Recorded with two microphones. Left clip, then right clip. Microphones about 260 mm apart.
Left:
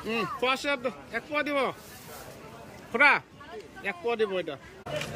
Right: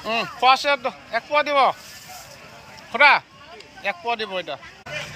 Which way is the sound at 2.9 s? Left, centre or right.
Centre.